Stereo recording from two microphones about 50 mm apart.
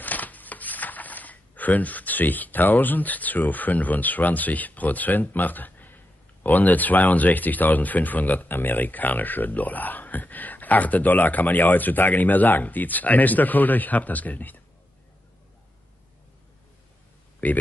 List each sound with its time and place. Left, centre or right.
0.0 s speech: left
17.4 s speech: left